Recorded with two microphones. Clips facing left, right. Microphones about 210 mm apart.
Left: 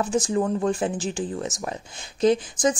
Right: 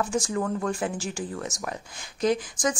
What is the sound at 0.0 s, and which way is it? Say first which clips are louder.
Speech: left 4 dB; 20° left (ahead or behind).